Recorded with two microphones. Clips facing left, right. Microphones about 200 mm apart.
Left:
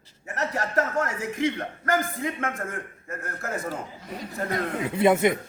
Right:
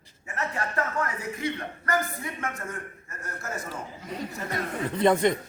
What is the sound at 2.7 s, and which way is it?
Speech, 55° left (ahead or behind).